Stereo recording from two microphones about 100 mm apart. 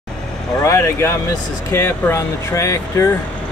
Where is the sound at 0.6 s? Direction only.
30° left (ahead or behind).